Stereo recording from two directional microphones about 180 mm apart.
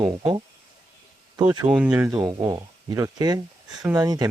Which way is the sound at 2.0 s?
20° right (ahead or behind).